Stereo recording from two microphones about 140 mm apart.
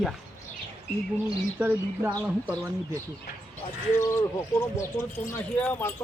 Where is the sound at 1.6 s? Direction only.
15° right (ahead or behind).